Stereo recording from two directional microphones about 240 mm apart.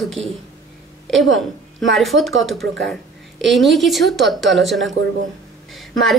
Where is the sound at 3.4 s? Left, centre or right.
Centre.